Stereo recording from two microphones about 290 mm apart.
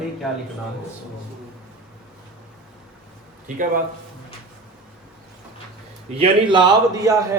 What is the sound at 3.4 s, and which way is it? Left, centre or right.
Speech, right.